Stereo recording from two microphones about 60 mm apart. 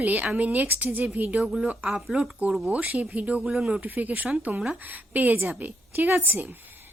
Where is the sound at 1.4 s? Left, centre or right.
Centre.